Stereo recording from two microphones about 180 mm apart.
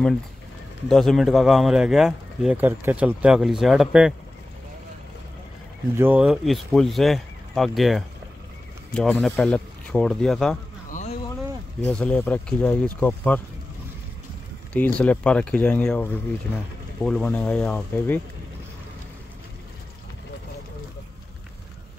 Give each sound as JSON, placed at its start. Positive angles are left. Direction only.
{"t": 0.8, "sound": "speech", "side_deg": 0}
{"t": 5.9, "sound": "speech", "side_deg": -10}
{"t": 10.9, "sound": "a sound", "side_deg": 40}
{"t": 11.8, "sound": "speech", "side_deg": 5}
{"t": 15.0, "sound": "speech", "side_deg": 5}